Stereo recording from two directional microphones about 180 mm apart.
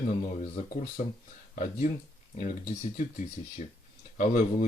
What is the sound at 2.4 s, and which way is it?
Speech, 45° left (ahead or behind).